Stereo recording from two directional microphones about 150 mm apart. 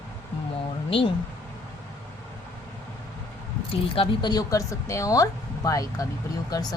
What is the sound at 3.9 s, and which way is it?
Speech, 35° left (ahead or behind).